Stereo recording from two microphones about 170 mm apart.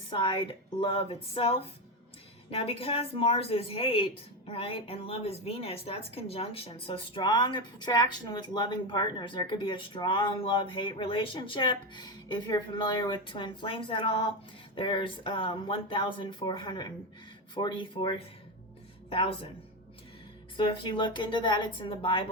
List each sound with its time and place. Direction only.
0.1 s speech: 30° left (ahead or behind)
20.6 s speech: 30° left (ahead or behind)